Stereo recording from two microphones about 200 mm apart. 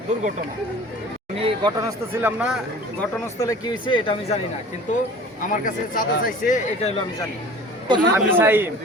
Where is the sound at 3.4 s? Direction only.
20° left (ahead or behind).